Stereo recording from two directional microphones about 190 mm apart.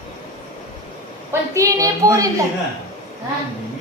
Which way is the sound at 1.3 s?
15° right (ahead or behind).